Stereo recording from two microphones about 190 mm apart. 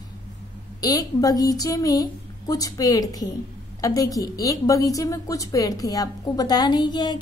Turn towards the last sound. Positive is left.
turn(degrees=25)  # may be behind; listen again after turning